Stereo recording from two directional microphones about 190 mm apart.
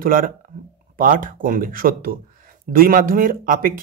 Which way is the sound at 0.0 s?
45° right (ahead or behind).